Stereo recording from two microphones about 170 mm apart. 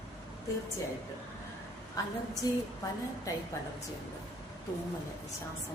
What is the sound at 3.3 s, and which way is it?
Speech, 20° left (ahead or behind).